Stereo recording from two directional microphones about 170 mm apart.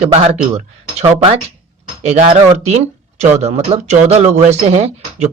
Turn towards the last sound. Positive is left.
turn(degrees=-40)  # may be behind; listen again after turning